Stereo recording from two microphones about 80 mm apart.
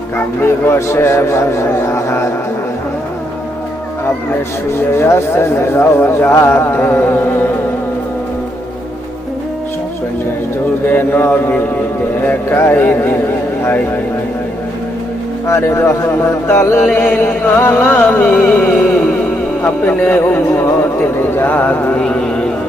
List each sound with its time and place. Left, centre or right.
0.6 s speech: left
4.9 s speech: left
10.8 s music: left
15.4 s speech: left
16.8 s music: left